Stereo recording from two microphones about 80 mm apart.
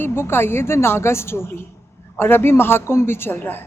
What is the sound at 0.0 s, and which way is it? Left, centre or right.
A woman's voice, left.